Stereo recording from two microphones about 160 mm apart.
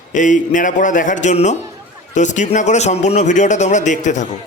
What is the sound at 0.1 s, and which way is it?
Speech, 50° left (ahead or behind).